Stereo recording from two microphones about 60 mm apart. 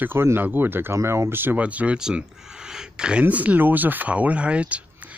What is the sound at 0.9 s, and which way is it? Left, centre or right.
Speech, right.